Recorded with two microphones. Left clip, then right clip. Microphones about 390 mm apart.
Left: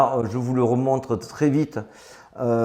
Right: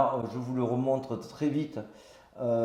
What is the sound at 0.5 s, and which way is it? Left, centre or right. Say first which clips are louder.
A man's voice: left 8 dB; left.